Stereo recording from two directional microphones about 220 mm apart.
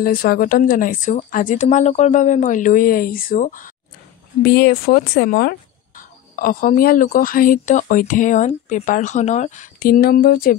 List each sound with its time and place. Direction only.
0.0 s speech: 40° left (ahead or behind)